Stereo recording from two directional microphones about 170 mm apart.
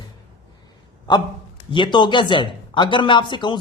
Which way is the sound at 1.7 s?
30° left (ahead or behind).